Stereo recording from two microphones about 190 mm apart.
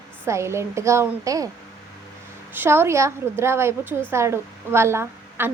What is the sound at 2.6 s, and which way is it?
A woman's voice, 15° right (ahead or behind).